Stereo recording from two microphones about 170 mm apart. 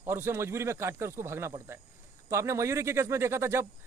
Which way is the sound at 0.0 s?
15° right (ahead or behind).